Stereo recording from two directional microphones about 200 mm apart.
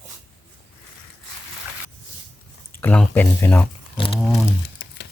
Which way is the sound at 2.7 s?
10° left (ahead or behind).